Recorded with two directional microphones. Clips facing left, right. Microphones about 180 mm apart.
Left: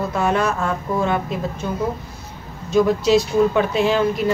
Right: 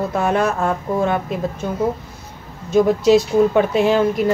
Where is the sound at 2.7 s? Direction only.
50° right (ahead or behind).